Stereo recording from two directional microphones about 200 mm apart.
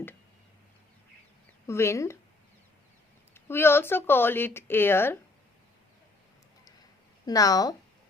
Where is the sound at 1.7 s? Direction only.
15° left (ahead or behind).